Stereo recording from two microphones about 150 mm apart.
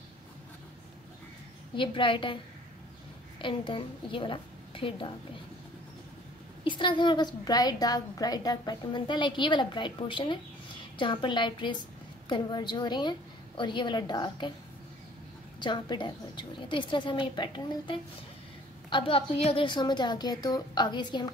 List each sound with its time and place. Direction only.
1.8 s a woman's voice: 35° left (ahead or behind)
6.6 s a woman's voice: 35° left (ahead or behind)
15.6 s a woman's voice: 30° left (ahead or behind)